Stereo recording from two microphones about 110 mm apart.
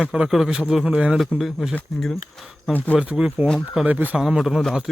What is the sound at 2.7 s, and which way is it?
Speech, 15° left (ahead or behind).